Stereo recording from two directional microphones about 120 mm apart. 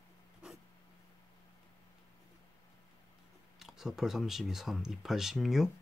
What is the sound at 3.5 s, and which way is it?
Speech, centre (ahead or behind).